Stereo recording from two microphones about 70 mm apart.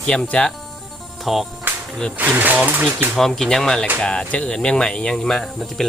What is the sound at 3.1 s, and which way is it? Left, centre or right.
Speech, centre.